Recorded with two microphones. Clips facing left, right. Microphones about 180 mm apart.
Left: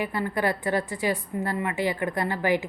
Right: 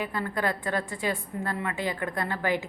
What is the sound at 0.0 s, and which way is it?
A woman's voice, 10° left (ahead or behind).